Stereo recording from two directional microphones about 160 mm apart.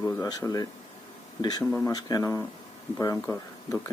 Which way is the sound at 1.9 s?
25° left (ahead or behind).